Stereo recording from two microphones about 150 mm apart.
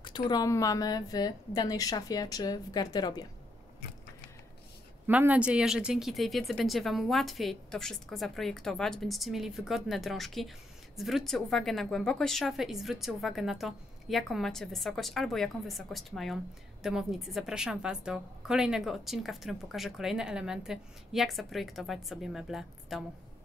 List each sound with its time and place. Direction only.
0.0 s a woman's voice: 30° left (ahead or behind)
5.0 s a woman's voice: 10° right (ahead or behind)